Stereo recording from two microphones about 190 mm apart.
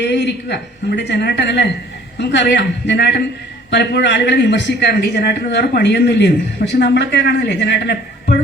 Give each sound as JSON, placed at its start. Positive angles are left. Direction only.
{"t": 0.0, "sound": "speech", "side_deg": 65}